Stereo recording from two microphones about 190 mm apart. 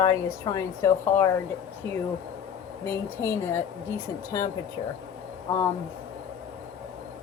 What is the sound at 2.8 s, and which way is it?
Speech, 10° left (ahead or behind).